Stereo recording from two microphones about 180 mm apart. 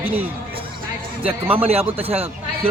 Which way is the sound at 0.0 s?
10° right (ahead or behind).